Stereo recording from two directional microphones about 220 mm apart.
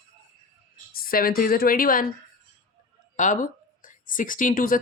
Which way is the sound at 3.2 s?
35° left (ahead or behind).